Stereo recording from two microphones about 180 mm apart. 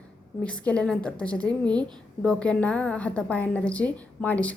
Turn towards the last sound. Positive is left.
turn(degrees=10)  # may be behind; listen again after turning